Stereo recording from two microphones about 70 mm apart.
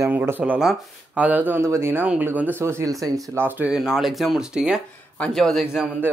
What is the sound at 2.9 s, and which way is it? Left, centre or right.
Speech, right.